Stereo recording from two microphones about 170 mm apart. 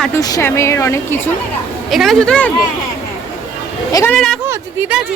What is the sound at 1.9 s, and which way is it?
Speech, centre (ahead or behind).